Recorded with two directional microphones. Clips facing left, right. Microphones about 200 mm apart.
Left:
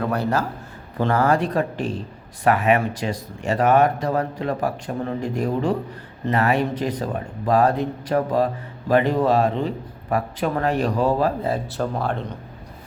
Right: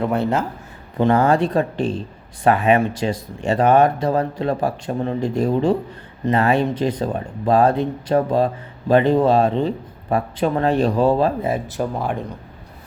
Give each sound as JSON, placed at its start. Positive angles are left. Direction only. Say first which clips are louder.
{"t": 0.0, "sound": "speech", "louder": "right 2 dB", "side_deg": -25}